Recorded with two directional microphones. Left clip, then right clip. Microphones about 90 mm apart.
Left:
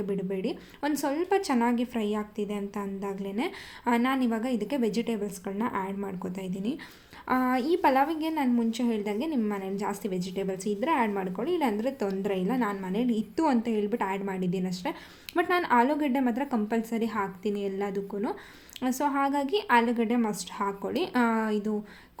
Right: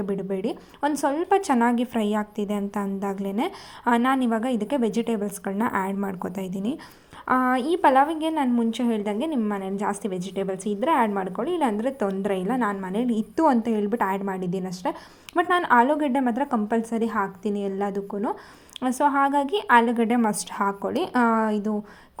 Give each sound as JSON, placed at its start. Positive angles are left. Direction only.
{"t": 0.0, "sound": "a woman's voice", "side_deg": -35}
{"t": 1.4, "sound": "a woman's voice", "side_deg": -45}
{"t": 3.8, "sound": "a woman's voice", "side_deg": -30}
{"t": 6.2, "sound": "a woman's voice", "side_deg": -55}
{"t": 7.3, "sound": "a woman's voice", "side_deg": -20}
{"t": 20.2, "sound": "a woman's voice", "side_deg": -65}
{"t": 20.7, "sound": "a woman's voice", "side_deg": -40}